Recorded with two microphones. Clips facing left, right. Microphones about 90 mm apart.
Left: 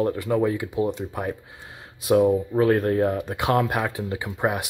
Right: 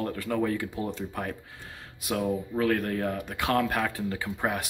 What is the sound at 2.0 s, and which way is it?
Speech, 25° left (ahead or behind).